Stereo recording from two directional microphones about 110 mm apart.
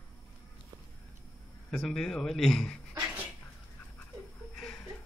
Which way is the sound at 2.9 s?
20° right (ahead or behind).